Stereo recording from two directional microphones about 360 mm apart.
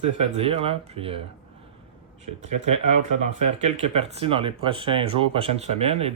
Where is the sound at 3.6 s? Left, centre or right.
Centre.